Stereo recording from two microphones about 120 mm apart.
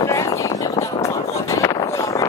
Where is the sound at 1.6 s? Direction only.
30° left (ahead or behind).